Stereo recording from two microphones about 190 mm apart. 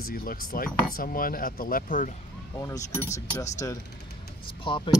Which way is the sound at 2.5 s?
15° left (ahead or behind).